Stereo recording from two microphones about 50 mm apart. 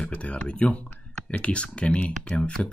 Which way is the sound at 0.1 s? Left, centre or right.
Left.